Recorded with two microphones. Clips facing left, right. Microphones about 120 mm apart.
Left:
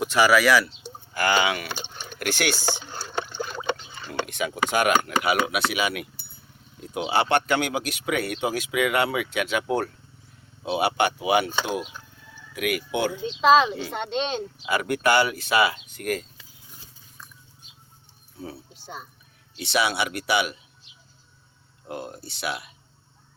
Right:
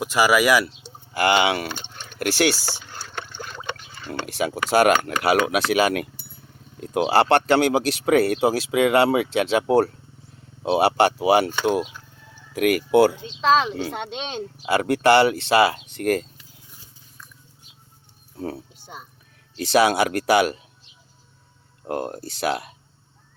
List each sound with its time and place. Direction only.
0.0 s speech: 5° right (ahead or behind)
0.8 s a sound: 30° right (ahead or behind)
2.1 s speech: 30° right (ahead or behind)
2.7 s a sound: 15° left (ahead or behind)
4.4 s speech: 35° right (ahead or behind)
7.1 s speech: 35° right (ahead or behind)
12.5 s speech: 40° right (ahead or behind)
13.3 s speech: 5° left (ahead or behind)
14.7 s speech: 30° right (ahead or behind)
18.3 s speech: 50° right (ahead or behind)
21.8 s speech: 50° right (ahead or behind)